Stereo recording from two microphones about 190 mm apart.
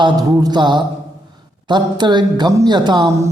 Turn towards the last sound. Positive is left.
turn(degrees=-15)  # may be behind; listen again after turning